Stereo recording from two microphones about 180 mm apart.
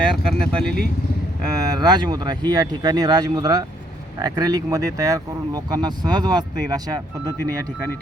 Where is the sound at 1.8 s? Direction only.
25° right (ahead or behind).